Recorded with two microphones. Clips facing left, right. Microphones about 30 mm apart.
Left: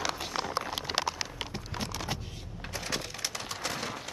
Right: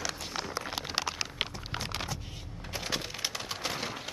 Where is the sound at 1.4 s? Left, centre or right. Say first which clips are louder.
Right 5 dB; right.